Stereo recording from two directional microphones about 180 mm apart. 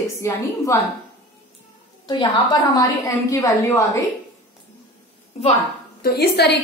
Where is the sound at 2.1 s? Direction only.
20° left (ahead or behind).